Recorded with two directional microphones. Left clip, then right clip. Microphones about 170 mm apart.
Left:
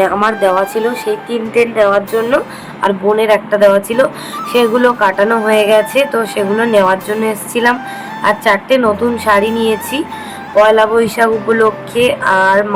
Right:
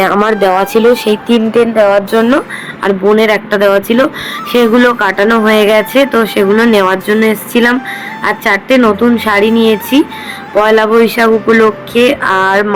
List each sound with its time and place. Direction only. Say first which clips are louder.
0.0 s speech: right 2 dB; 30° right (ahead or behind); by 1.1 s 45° right (ahead or behind)
1.5 s speech: right 1 dB; 15° right (ahead or behind)
1.9 s speech: right 4 dB; 35° right (ahead or behind)
2.8 s speech: right 3 dB; 20° right (ahead or behind)